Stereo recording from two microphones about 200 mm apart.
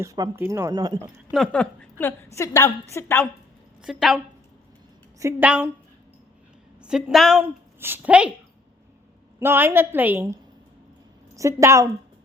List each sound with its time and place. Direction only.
0.0 s speech: 15° right (ahead or behind)
1.3 s a woman's voice: 5° left (ahead or behind)
3.8 s a woman's voice: 5° right (ahead or behind)
5.2 s speech: 10° right (ahead or behind)
6.8 s a woman's voice: 5° right (ahead or behind)
9.4 s speech: 10° right (ahead or behind)
11.3 s speech: 15° right (ahead or behind)